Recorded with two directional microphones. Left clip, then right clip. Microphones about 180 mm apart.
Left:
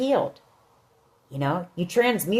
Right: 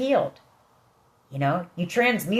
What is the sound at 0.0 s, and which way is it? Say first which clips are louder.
Speech: even; 55° left (ahead or behind).